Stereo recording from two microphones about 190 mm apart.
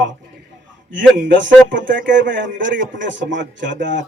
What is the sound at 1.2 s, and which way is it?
Speech, 75° right (ahead or behind).